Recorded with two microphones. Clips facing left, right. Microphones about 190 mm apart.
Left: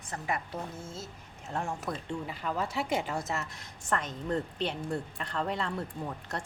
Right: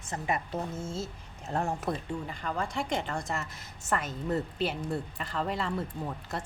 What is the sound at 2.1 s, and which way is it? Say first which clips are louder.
Speech: even; 5° left (ahead or behind).